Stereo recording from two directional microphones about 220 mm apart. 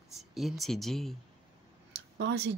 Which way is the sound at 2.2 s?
50° right (ahead or behind).